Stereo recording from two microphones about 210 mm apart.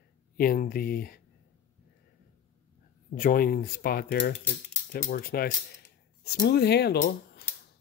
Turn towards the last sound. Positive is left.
turn(degrees=50)  # may be behind; listen again after turning